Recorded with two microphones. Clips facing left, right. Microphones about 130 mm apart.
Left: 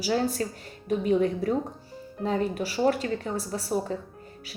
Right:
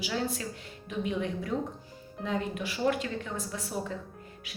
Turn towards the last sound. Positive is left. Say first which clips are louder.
# left 6 dB
turn(degrees=35)  # may be behind; listen again after turning